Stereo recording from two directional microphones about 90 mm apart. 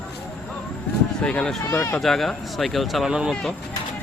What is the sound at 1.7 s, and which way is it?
Speech, 25° left (ahead or behind).